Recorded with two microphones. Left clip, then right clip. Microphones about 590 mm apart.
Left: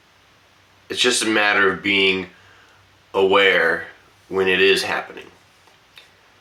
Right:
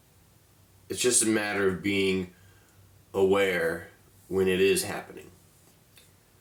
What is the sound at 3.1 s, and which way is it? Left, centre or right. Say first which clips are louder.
Speech: left 9 dB; right.